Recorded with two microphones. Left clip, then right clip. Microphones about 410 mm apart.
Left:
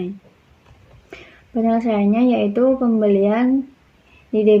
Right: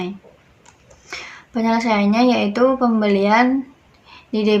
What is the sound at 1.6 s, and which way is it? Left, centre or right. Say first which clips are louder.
A woman's voice: right 1 dB; centre.